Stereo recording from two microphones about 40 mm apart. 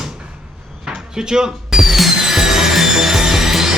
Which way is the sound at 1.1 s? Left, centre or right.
Centre.